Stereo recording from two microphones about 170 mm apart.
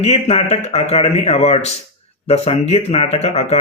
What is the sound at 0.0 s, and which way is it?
Speech, 35° left (ahead or behind).